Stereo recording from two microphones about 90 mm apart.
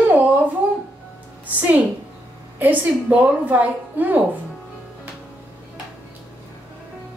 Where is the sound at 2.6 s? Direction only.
20° right (ahead or behind).